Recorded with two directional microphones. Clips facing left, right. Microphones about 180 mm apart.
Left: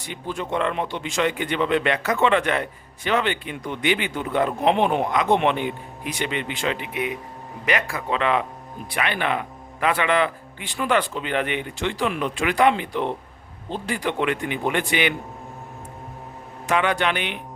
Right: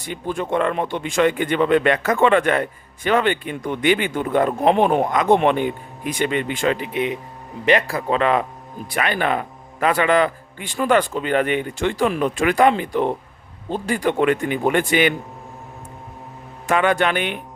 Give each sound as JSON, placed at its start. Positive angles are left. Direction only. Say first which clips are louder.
{"t": 0.0, "sound": "speech", "louder": "right 4 dB", "side_deg": -50}
{"t": 16.6, "sound": "speech", "louder": "right 3 dB", "side_deg": -50}